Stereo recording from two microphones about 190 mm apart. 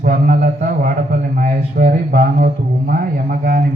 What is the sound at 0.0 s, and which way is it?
A man's voice, 50° right (ahead or behind).